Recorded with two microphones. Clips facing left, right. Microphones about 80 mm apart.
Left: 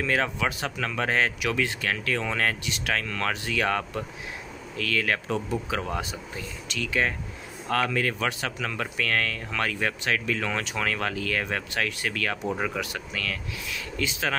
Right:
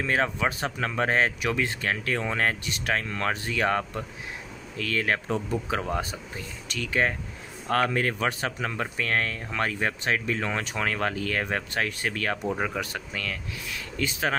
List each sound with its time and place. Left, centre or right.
0.0 s speech: right